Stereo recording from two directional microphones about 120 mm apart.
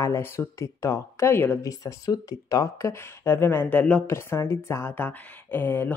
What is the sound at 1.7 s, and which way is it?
Speech, 30° left (ahead or behind).